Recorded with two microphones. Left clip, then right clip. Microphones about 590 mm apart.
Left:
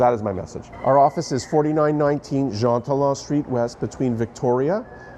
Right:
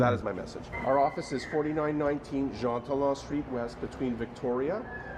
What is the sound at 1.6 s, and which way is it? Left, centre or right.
Speech, left.